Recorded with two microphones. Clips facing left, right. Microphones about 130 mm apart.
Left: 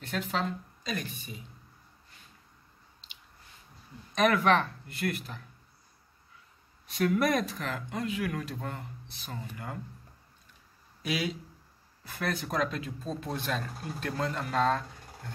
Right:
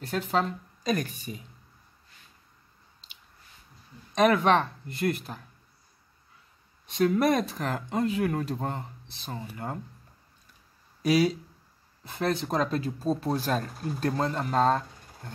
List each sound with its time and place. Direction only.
0.0 s speech: 40° right (ahead or behind)
4.2 s speech: 25° right (ahead or behind)
6.9 s speech: 25° right (ahead or behind)
11.0 s speech: 40° right (ahead or behind)
12.0 s speech: 25° right (ahead or behind)